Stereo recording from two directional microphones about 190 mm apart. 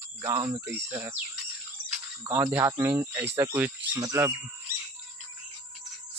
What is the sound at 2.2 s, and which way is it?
Speech, 15° right (ahead or behind).